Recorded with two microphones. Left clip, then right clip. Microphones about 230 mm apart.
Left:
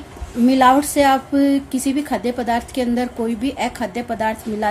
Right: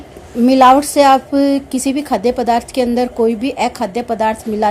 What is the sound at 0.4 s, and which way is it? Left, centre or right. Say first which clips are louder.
A woman's voice: right 5 dB; right.